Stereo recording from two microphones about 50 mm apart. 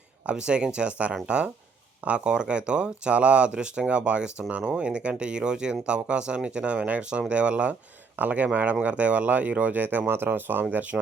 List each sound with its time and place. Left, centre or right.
0.3 s speech: centre; by 10.8 s right